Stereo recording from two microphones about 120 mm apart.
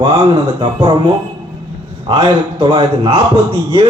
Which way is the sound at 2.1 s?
40° right (ahead or behind).